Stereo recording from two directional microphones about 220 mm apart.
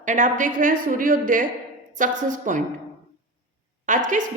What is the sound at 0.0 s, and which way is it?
A woman's voice, 35° right (ahead or behind).